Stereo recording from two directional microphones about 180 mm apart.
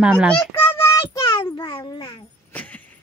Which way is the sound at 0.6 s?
15° left (ahead or behind).